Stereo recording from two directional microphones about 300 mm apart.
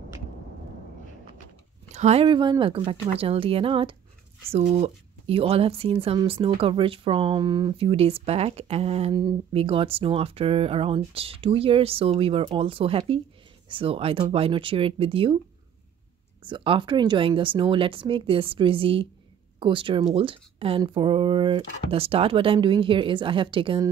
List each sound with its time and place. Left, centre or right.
1.9 s speech: right
16.4 s speech: centre